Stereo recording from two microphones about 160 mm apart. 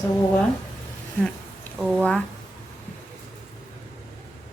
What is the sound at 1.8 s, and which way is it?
Speech, 5° right (ahead or behind).